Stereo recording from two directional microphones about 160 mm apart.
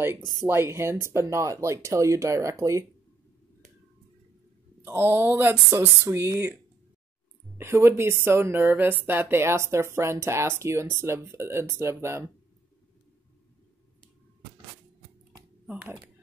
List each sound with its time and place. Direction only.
0.2 s speech: 25° left (ahead or behind)
0.5 s speech: 15° right (ahead or behind)
4.8 s a woman's voice: 15° right (ahead or behind)
15.6 s speech: 10° right (ahead or behind)